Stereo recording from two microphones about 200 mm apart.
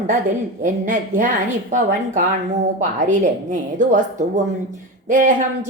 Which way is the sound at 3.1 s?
40° right (ahead or behind).